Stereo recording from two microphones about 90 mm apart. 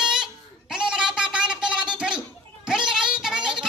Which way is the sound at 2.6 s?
10° right (ahead or behind).